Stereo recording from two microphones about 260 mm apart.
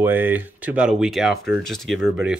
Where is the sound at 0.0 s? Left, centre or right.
Centre.